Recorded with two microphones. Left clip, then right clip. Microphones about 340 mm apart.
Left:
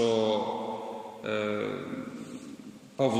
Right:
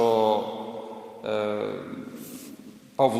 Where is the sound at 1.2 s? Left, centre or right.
Centre.